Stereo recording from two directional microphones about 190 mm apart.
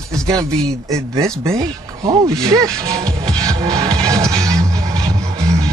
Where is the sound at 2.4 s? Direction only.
15° right (ahead or behind).